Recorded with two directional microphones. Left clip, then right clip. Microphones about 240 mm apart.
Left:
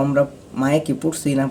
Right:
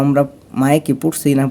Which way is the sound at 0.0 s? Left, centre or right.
Right.